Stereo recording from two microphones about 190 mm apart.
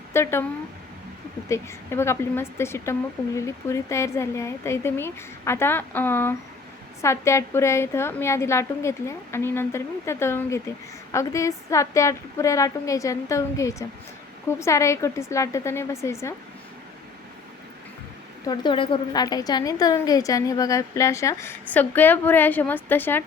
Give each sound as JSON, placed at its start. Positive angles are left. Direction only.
{"t": 0.1, "sound": "speech", "side_deg": 15}
{"t": 1.5, "sound": "a woman's voice", "side_deg": 15}
{"t": 18.4, "sound": "a woman's voice", "side_deg": 25}